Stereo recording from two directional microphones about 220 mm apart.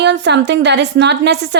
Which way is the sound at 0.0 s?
50° right (ahead or behind).